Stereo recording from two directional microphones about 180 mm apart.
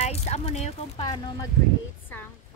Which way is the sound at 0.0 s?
35° left (ahead or behind).